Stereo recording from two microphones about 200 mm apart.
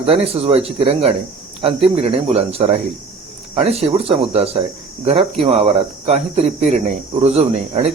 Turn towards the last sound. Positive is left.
turn(degrees=-30)  # may be behind; listen again after turning